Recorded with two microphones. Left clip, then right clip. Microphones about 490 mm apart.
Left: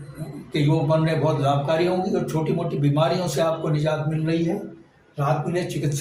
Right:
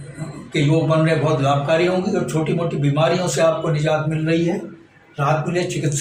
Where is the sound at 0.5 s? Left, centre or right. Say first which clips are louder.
Right 4 dB; left.